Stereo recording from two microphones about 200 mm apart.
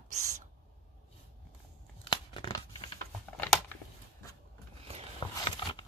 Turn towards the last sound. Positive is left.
turn(degrees=20)  # may be behind; listen again after turning